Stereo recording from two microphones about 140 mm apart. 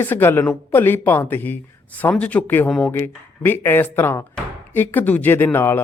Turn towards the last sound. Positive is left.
turn(degrees=15)  # may be behind; listen again after turning